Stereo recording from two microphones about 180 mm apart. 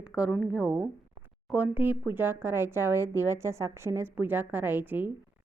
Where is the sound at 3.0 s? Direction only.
20° left (ahead or behind).